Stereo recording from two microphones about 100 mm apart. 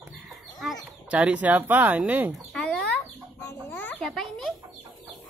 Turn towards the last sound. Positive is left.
turn(degrees=5)  # may be behind; listen again after turning